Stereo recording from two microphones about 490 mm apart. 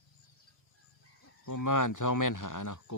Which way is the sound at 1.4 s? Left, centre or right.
Left.